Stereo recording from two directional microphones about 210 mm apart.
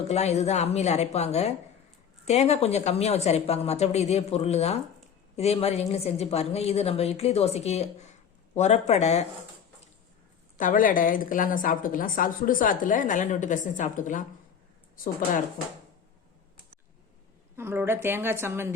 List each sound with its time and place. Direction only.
0.1 s a woman's voice: 30° left (ahead or behind)
10.6 s a woman's voice: 40° left (ahead or behind)
17.6 s a woman's voice: 10° right (ahead or behind)